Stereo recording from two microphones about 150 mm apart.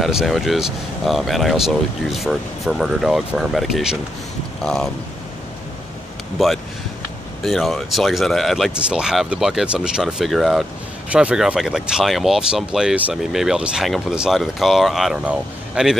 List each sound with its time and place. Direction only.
0.0 s speech: centre (ahead or behind)
6.3 s speech: centre (ahead or behind)